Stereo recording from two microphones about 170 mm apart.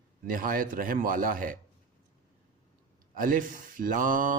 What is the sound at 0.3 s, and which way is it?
A man's voice, 55° right (ahead or behind).